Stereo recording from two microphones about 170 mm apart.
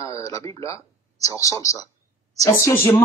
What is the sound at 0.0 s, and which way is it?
Speech, 20° left (ahead or behind).